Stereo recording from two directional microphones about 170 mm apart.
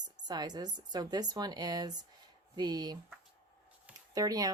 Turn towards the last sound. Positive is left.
turn(degrees=-20)  # may be behind; listen again after turning